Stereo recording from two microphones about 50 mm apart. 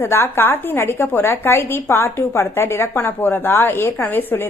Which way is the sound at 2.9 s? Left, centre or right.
Left.